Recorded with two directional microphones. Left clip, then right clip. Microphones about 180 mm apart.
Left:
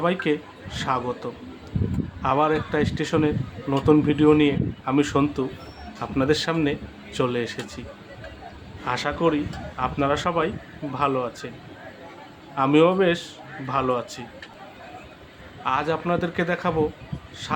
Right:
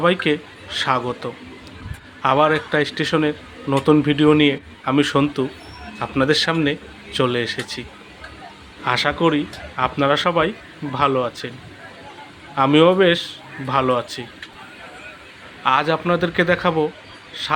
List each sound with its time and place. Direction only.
0.0 s a man's voice: 15° right (ahead or behind)
12.5 s a man's voice: 15° right (ahead or behind)
15.6 s speech: 20° right (ahead or behind)